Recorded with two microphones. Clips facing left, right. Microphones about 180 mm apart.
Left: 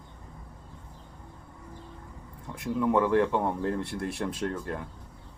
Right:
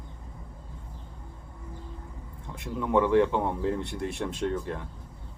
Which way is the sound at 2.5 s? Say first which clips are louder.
Left 1 dB; centre (ahead or behind).